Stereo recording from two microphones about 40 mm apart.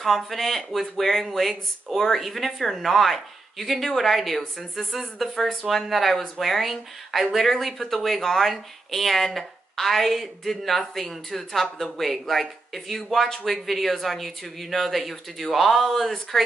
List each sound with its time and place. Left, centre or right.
0.0 s a woman's voice: centre